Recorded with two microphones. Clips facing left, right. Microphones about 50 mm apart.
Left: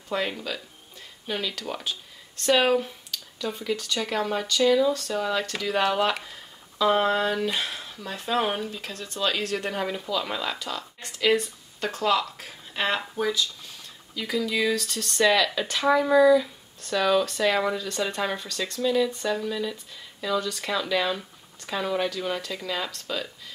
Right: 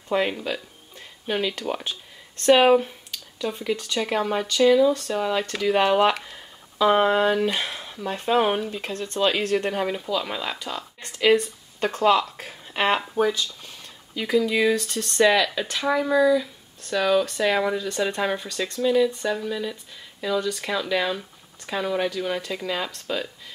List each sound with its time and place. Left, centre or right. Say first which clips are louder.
0.1 s music: right 5 dB; centre
1.6 s speech: right 4 dB; centre
8.1 s speech: right 5 dB; right
9.5 s speech: right 4 dB; centre
11.3 s speech: right 4 dB; right